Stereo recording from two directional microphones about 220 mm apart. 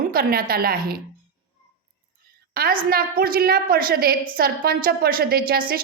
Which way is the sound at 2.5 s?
45° right (ahead or behind).